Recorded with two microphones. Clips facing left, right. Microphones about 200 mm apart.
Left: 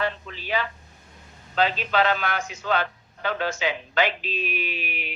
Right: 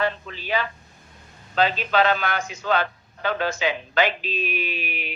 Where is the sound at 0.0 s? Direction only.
45° right (ahead or behind).